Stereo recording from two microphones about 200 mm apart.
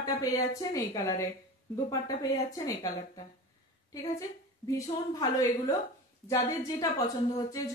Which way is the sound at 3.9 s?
15° left (ahead or behind).